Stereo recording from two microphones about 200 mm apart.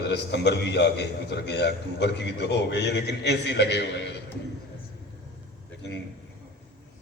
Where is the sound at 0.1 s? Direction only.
60° left (ahead or behind).